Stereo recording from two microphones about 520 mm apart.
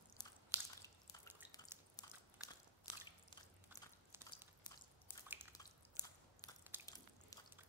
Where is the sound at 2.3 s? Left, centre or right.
Centre.